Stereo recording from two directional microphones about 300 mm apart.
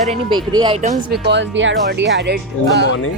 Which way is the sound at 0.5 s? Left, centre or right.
Centre.